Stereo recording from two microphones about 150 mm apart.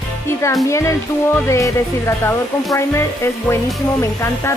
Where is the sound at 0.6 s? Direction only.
20° left (ahead or behind).